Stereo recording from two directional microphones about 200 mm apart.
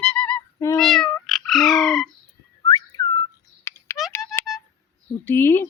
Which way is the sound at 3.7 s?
15° left (ahead or behind).